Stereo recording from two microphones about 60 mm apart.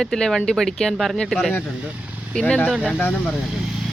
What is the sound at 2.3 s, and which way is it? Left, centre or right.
Speech, centre.